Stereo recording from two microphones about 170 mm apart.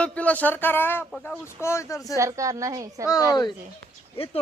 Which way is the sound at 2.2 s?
20° right (ahead or behind).